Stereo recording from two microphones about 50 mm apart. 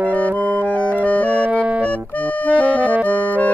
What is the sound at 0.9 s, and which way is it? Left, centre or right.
Music, left.